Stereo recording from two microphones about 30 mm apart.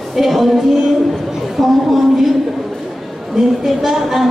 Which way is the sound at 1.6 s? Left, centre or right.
Centre.